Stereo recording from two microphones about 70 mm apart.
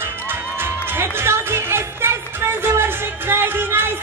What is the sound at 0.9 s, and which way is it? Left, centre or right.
Music, right.